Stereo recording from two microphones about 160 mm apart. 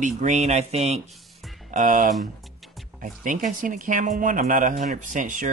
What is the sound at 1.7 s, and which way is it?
Speech, 55° right (ahead or behind).